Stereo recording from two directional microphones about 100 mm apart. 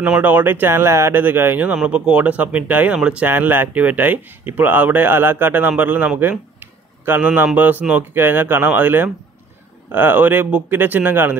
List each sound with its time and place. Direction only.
0.0 s speech: 15° right (ahead or behind)
6.6 s a sound: 20° right (ahead or behind)
7.5 s speech: 15° right (ahead or behind)